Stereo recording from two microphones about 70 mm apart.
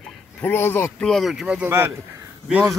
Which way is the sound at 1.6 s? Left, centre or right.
Right.